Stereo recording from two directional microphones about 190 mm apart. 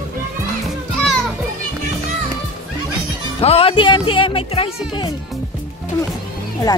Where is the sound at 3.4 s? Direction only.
30° left (ahead or behind).